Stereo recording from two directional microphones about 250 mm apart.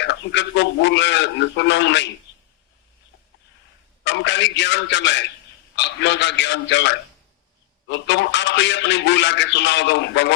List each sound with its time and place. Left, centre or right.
0.0 s a man's voice: left
2.3 s a sound: left
4.0 s a man's voice: left